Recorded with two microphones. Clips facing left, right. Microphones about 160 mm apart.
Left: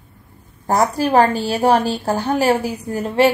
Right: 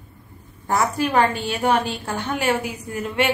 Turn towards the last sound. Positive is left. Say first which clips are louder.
# left 6 dB
turn(degrees=35)  # may be behind; listen again after turning